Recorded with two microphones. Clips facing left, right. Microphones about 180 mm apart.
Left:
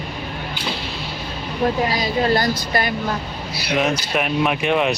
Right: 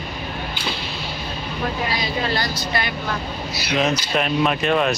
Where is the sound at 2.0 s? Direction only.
45° left (ahead or behind).